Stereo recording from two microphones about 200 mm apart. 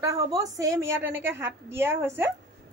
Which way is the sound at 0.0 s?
15° right (ahead or behind).